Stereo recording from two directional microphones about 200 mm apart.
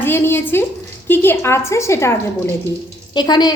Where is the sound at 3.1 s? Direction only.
20° left (ahead or behind).